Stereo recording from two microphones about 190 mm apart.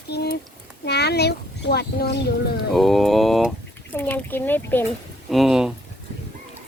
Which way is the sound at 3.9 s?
10° left (ahead or behind).